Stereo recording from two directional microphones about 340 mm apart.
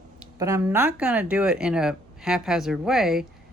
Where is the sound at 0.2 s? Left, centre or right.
Centre.